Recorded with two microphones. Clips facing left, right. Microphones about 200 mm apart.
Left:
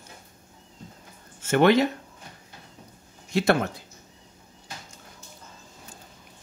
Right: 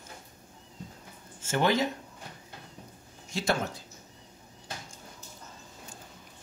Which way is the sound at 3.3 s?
60° left (ahead or behind).